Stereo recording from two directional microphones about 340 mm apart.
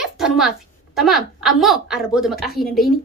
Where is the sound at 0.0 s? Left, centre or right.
Centre.